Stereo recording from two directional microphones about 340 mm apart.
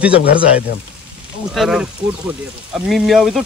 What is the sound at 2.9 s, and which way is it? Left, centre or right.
Speech, centre.